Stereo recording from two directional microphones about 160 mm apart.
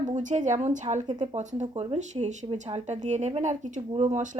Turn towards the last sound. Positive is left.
turn(degrees=-50)  # may be behind; listen again after turning